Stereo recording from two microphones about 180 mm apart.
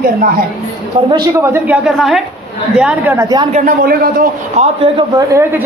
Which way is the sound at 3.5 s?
55° right (ahead or behind).